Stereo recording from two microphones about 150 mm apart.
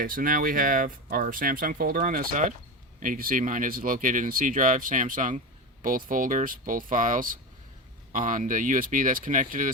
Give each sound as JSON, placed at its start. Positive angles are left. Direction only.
{"t": 0.0, "sound": "speech", "side_deg": -65}